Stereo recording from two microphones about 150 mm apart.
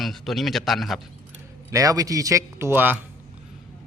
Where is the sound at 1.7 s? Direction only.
20° right (ahead or behind).